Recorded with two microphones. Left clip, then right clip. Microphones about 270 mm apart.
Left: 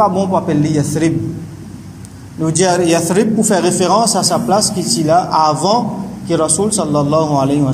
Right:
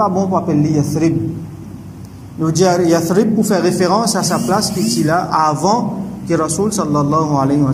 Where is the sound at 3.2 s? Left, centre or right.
Centre.